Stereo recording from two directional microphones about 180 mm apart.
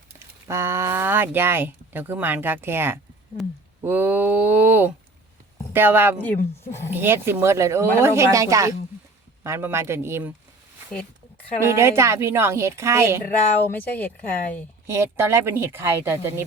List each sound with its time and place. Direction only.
0.4 s speech: 15° right (ahead or behind)
3.4 s speech: centre (ahead or behind)
3.8 s speech: 10° right (ahead or behind)
6.2 s speech: 15° left (ahead or behind)
6.9 s speech: 10° right (ahead or behind)
11.6 s speech: 15° right (ahead or behind)
13.7 s speech: 10° left (ahead or behind)
14.8 s speech: 15° right (ahead or behind)